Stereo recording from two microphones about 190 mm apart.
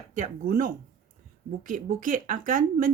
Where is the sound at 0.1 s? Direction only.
40° right (ahead or behind).